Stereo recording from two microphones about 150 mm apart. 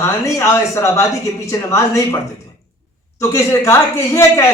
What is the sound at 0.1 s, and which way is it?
A man's voice, 20° left (ahead or behind).